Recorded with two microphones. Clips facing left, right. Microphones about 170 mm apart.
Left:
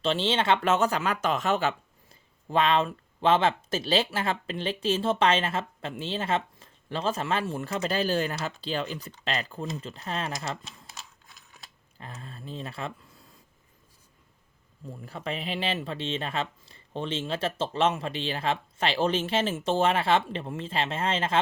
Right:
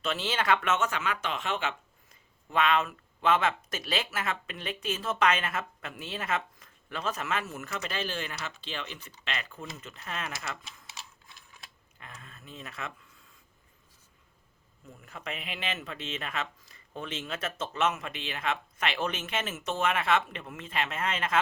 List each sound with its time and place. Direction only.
0.0 s speech: 30° left (ahead or behind)
11.9 s speech: 35° left (ahead or behind)
14.8 s speech: 35° left (ahead or behind)